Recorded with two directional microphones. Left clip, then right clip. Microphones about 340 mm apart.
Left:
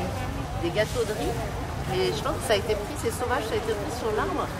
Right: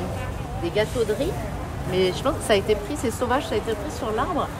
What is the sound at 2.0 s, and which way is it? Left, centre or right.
Speech, centre.